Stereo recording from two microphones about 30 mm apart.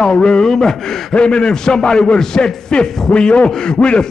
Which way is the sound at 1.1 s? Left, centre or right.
Left.